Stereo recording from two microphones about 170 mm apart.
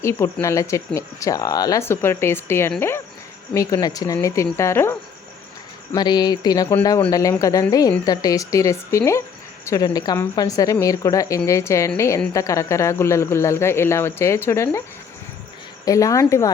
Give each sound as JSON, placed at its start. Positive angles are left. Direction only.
{"t": 0.0, "sound": "a woman's voice", "side_deg": 15}
{"t": 15.8, "sound": "a woman's voice", "side_deg": 20}